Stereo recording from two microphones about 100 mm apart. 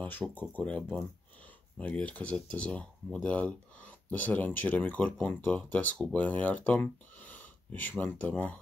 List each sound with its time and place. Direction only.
0.0 s speech: 15° left (ahead or behind)